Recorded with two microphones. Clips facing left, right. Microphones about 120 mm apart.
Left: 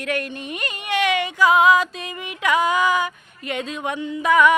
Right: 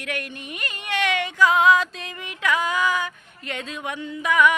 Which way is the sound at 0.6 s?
15° left (ahead or behind).